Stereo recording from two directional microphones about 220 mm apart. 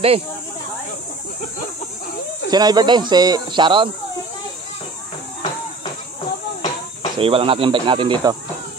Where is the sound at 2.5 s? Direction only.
20° right (ahead or behind).